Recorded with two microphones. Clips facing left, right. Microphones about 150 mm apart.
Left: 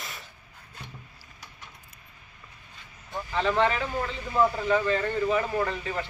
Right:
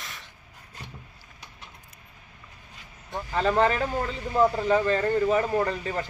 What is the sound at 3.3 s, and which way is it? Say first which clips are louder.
Speech: right 2 dB; 40° right (ahead or behind).